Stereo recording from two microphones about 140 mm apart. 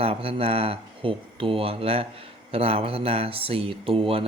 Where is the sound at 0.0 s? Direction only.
40° right (ahead or behind).